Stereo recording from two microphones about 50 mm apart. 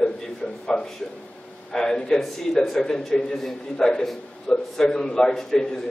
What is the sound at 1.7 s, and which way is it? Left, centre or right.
A man's voice, centre.